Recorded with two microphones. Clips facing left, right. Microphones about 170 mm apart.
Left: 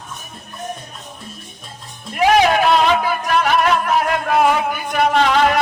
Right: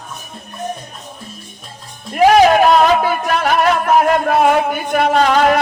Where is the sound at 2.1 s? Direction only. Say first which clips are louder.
Right 4 dB; 40° right (ahead or behind).